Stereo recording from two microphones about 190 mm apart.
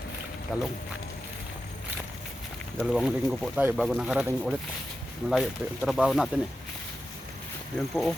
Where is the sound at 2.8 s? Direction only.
5° right (ahead or behind).